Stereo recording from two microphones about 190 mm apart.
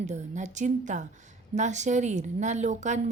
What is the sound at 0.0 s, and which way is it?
Speech, 40° right (ahead or behind).